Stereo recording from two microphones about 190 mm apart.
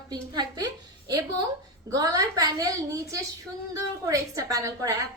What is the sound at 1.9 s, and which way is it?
A woman's voice, 20° right (ahead or behind).